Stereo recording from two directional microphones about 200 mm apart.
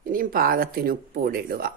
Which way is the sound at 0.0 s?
45° right (ahead or behind).